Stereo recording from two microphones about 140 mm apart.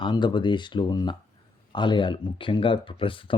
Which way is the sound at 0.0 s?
35° left (ahead or behind).